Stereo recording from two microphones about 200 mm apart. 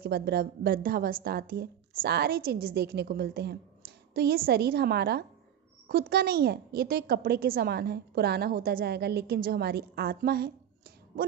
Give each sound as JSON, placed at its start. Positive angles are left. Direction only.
{"t": 0.0, "sound": "a woman's voice", "side_deg": -50}